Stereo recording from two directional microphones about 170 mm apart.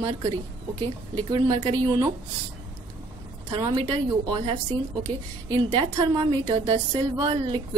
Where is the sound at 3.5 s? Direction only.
30° right (ahead or behind).